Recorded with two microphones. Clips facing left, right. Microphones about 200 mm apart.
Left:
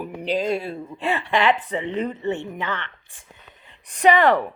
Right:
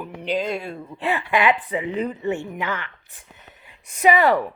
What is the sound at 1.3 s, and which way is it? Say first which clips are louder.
Speech: even; 10° right (ahead or behind).